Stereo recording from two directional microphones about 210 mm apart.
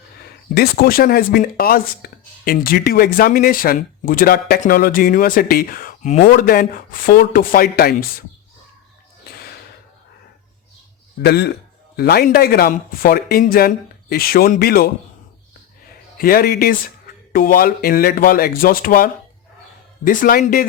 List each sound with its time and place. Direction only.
0.5 s speech: 45° left (ahead or behind)
11.2 s speech: 50° left (ahead or behind)
16.1 s a man's voice: 45° left (ahead or behind)